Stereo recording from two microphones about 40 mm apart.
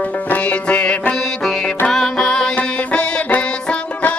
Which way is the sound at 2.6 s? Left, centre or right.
Left.